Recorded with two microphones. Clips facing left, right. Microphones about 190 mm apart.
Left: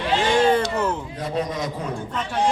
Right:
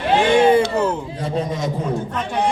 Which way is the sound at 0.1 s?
60° right (ahead or behind).